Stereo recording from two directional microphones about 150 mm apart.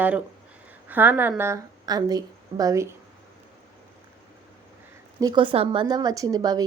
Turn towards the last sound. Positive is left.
turn(degrees=-25)  # may be behind; listen again after turning